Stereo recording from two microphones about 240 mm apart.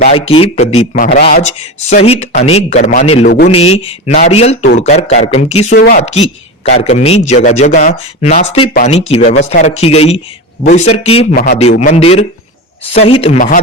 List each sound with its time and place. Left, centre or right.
0.1 s a man's voice: left
3.2 s speech: left
3.5 s a man's voice: left
5.7 s speech: left
6.7 s a man's voice: left